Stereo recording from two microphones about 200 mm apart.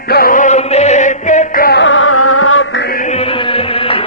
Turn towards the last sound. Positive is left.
turn(degrees=30)  # may be behind; listen again after turning